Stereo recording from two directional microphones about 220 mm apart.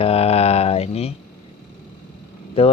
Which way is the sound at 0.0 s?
25° left (ahead or behind).